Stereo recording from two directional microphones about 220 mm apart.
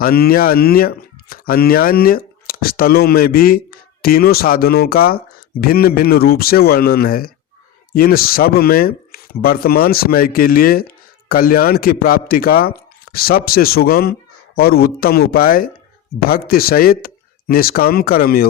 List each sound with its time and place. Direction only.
0.0 s speech: 45° left (ahead or behind)